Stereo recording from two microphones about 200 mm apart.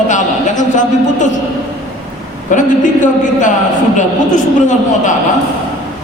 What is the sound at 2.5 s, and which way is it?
A man's voice, 40° left (ahead or behind).